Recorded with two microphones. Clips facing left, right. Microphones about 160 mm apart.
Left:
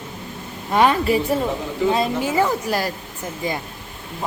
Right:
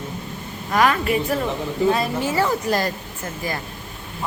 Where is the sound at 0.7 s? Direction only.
30° left (ahead or behind); by 2.9 s 10° left (ahead or behind).